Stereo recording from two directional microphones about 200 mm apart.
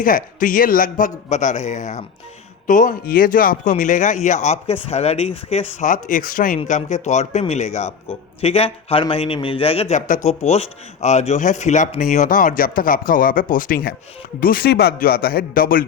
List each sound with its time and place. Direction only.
0.0 s a man's voice: 40° left (ahead or behind)